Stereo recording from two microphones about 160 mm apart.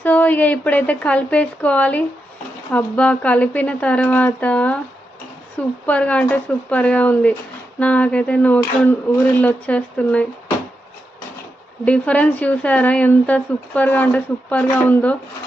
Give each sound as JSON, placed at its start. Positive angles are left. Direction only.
{"t": 0.0, "sound": "speech", "side_deg": 10}
{"t": 11.9, "sound": "speech", "side_deg": 10}